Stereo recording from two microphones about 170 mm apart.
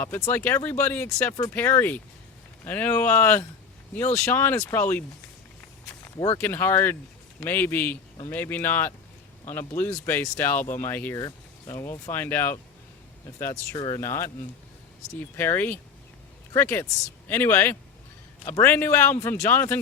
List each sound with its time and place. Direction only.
0.0 s speech: 15° left (ahead or behind)
6.1 s speech: 25° left (ahead or behind)
6.4 s speech: 10° left (ahead or behind)
13.4 s speech: 25° left (ahead or behind)
15.4 s speech: 10° left (ahead or behind)